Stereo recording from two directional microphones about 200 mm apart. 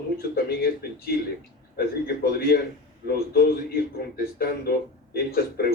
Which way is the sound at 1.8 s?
50° left (ahead or behind).